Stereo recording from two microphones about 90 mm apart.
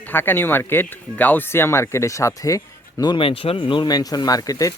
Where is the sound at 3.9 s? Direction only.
45° left (ahead or behind).